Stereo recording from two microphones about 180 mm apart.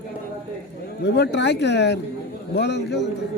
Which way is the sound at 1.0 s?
70° left (ahead or behind).